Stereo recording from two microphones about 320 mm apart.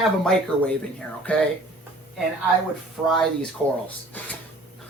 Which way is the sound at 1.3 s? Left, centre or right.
Centre.